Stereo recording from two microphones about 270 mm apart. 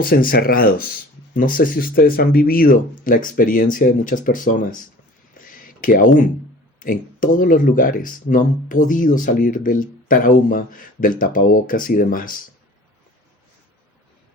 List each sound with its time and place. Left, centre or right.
0.0 s speech: left
5.4 s a sound: left
6.7 s speech: left